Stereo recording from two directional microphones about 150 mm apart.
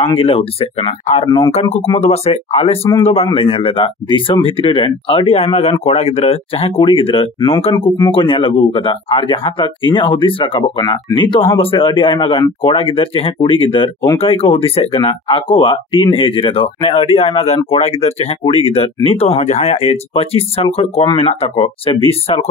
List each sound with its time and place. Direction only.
0.0 s speech: 40° left (ahead or behind)
1.2 s speech: 25° left (ahead or behind)
1.5 s speech: 50° left (ahead or behind)
2.8 s a man's voice: 15° left (ahead or behind)
3.3 s speech: 40° left (ahead or behind)